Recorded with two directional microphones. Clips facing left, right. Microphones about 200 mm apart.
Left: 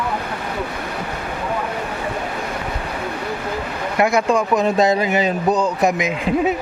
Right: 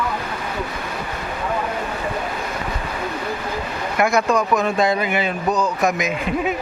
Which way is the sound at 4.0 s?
25° left (ahead or behind).